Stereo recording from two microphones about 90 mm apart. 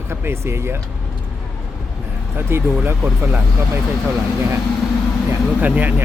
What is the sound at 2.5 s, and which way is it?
Speech, 25° right (ahead or behind).